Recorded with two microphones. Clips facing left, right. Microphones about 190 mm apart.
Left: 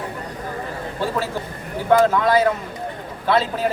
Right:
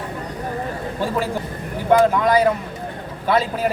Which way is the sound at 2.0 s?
15° right (ahead or behind).